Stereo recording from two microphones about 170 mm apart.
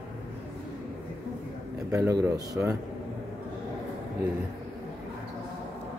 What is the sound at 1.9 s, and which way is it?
Speech, 20° right (ahead or behind).